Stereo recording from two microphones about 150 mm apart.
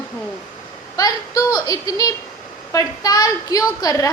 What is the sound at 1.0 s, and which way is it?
A woman's voice, 25° left (ahead or behind).